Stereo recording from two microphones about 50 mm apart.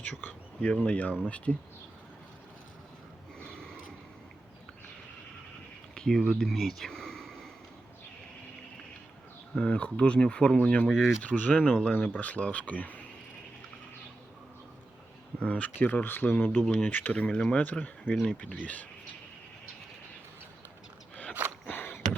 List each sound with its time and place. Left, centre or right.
0.0 s speech: left
0.6 s speech: left
3.3 s a sound: centre
5.9 s a sound: centre
6.1 s speech: centre
9.6 s speech: left
10.9 s speech: centre
11.2 s speech: left
15.4 s speech: left
17.2 s speech: centre
17.6 s speech: left
21.7 s a sound: left